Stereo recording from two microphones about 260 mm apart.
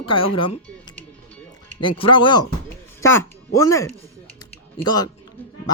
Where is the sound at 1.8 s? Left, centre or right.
Centre.